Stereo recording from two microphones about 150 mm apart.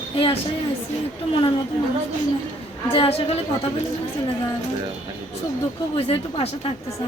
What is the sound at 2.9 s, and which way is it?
Speech, 40° left (ahead or behind).